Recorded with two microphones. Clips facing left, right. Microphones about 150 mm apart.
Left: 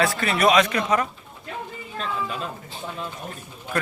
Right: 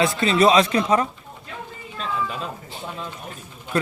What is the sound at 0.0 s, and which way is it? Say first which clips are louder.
Speech: right 3 dB; 20° right (ahead or behind).